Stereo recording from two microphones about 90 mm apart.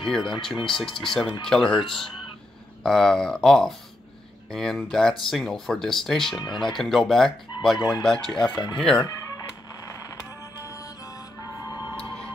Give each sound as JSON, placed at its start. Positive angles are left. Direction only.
{"t": 0.0, "sound": "speech", "side_deg": 5}
{"t": 6.4, "sound": "speech", "side_deg": 60}
{"t": 6.8, "sound": "speech", "side_deg": 5}
{"t": 7.7, "sound": "speech", "side_deg": 50}
{"t": 8.0, "sound": "speech", "side_deg": 5}
{"t": 11.4, "sound": "music", "side_deg": 45}